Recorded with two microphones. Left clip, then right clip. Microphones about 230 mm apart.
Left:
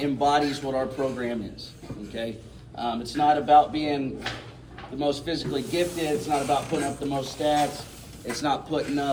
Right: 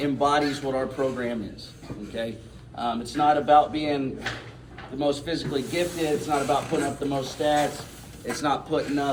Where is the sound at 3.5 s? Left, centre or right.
Centre.